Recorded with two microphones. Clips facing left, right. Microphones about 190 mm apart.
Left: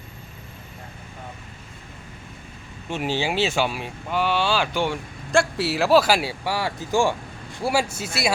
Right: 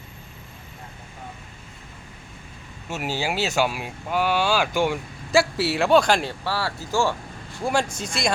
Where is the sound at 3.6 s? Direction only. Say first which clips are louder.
Right 1 dB; 10° right (ahead or behind); by 8.3 s 5° left (ahead or behind).